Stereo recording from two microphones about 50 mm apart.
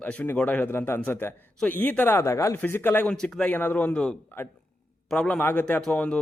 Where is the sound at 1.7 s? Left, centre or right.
Left.